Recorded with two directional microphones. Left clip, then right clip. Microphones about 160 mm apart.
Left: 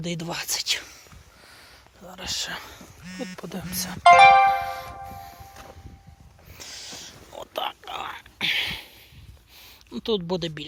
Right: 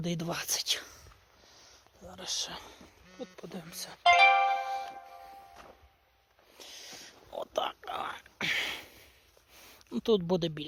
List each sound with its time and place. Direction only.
0.0 s speech: 35° right (ahead or behind)
2.0 s speech: 15° right (ahead or behind)
6.6 s a sound: 30° right (ahead or behind)
9.6 s speech: 45° right (ahead or behind)